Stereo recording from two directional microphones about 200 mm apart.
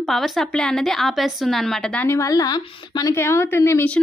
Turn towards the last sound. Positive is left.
turn(degrees=10)  # may be behind; listen again after turning